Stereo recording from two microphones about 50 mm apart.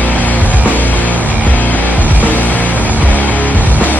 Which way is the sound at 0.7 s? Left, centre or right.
Left.